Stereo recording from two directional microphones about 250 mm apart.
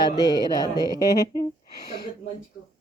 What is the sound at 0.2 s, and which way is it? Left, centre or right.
A woman's voice, centre.